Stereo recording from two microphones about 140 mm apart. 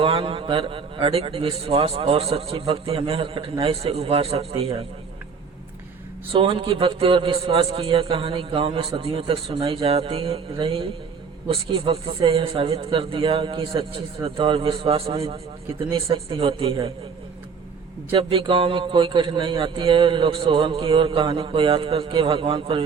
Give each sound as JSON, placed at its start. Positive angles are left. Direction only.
{"t": 0.0, "sound": "a man's voice", "side_deg": -40}
{"t": 6.3, "sound": "a man's voice", "side_deg": -40}
{"t": 18.1, "sound": "a man's voice", "side_deg": -40}